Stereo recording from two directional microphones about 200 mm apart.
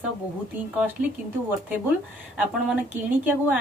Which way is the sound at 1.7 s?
10° right (ahead or behind).